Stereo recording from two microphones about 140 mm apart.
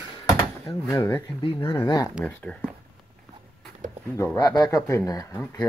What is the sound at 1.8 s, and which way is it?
Speech, 30° left (ahead or behind).